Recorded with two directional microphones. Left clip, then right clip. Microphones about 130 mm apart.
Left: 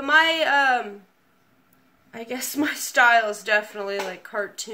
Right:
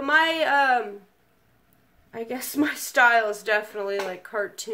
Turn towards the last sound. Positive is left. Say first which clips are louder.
# even
turn(degrees=-30)  # may be behind; listen again after turning